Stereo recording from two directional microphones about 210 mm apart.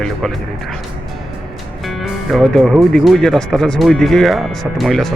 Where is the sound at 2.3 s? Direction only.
Centre (ahead or behind).